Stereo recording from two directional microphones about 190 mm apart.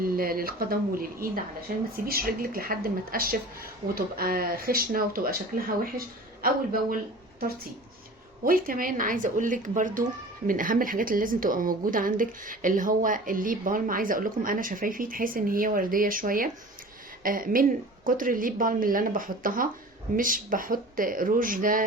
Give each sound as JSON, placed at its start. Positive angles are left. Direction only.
{"t": 0.0, "sound": "speech", "side_deg": -50}
{"t": 6.9, "sound": "speech", "side_deg": -50}